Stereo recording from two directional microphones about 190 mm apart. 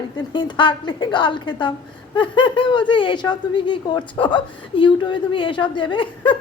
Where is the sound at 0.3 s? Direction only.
25° left (ahead or behind).